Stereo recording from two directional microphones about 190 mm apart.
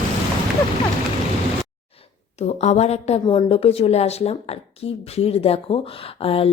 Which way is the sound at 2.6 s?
35° left (ahead or behind).